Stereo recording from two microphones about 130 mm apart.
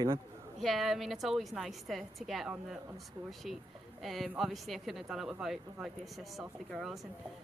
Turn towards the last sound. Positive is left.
turn(degrees=0)  # may be behind; listen again after turning